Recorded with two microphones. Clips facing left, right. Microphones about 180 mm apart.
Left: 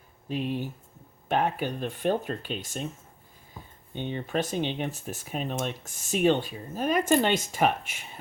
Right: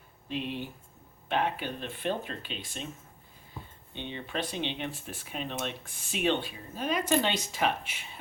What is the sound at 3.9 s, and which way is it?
Speech, 45° left (ahead or behind).